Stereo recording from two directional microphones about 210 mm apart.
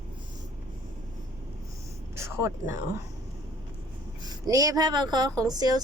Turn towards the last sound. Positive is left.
turn(degrees=-20)  # may be behind; listen again after turning